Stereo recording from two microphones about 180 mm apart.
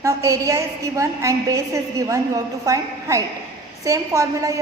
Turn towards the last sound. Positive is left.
turn(degrees=-15)  # may be behind; listen again after turning